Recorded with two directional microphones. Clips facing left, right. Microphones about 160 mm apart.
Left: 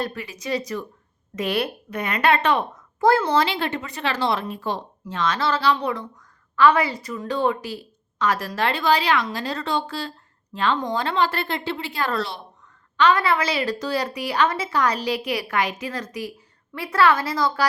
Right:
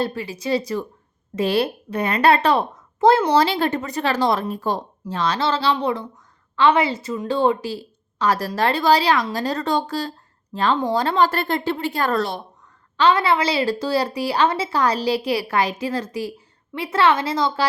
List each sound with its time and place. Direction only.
0.0 s a woman's voice: 30° right (ahead or behind)
3.0 s a woman's voice: 20° right (ahead or behind)
3.3 s a woman's voice: 40° right (ahead or behind)
13.0 s a woman's voice: 30° right (ahead or behind)